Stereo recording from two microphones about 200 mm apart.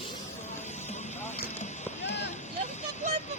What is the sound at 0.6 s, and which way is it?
Vehicle, 35° left (ahead or behind).